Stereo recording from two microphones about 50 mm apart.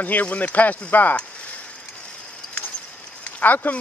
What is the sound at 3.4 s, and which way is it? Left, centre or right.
Speech, left.